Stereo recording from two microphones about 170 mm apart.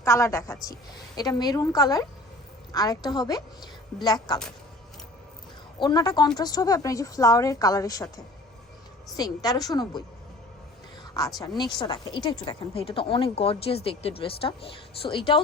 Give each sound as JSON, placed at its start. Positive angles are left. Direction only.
{"t": 0.0, "sound": "a woman's voice", "side_deg": 15}
{"t": 5.8, "sound": "a woman's voice", "side_deg": 25}
{"t": 9.1, "sound": "a woman's voice", "side_deg": 20}
{"t": 11.3, "sound": "speech", "side_deg": 25}